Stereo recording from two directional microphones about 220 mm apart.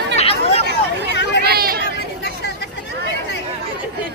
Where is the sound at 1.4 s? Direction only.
45° right (ahead or behind).